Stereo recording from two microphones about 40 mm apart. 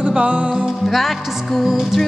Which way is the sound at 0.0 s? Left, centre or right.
Right.